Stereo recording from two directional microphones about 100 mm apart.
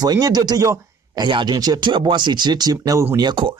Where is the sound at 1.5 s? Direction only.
40° right (ahead or behind).